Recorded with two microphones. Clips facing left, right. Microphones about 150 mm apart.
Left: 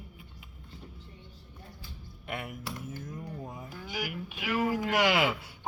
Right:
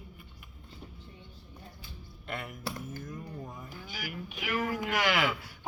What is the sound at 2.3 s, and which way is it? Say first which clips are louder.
Speech: left 1 dB; 15° left (ahead or behind).